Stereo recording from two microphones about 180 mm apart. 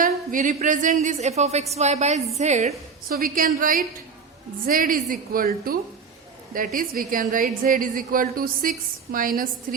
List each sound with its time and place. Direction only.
0.0 s a woman's voice: 45° right (ahead or behind)